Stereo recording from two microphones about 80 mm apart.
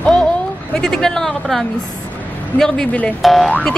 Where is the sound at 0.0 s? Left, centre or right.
Centre.